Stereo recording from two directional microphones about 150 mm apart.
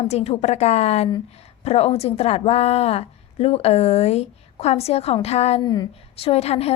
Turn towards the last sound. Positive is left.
turn(degrees=45)  # may be behind; listen again after turning